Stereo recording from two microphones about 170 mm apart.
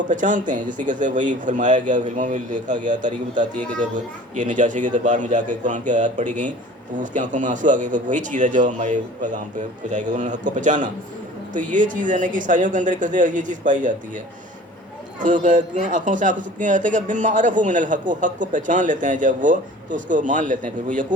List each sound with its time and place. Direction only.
0.1 s speech: 50° right (ahead or behind)
15.2 s speech: 45° right (ahead or behind)